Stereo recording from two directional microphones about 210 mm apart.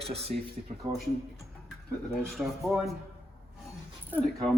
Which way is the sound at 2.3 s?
Centre (ahead or behind).